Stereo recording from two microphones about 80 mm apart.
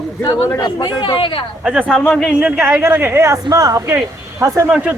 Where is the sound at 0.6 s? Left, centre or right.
Left.